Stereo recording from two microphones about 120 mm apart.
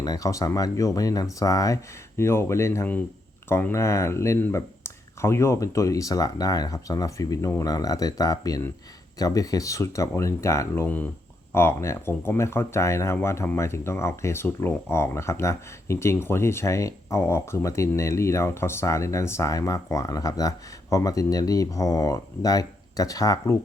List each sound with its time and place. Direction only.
0.0 s speech: 30° left (ahead or behind)
10.8 s speech: 15° left (ahead or behind); by 23.6 s 30° left (ahead or behind)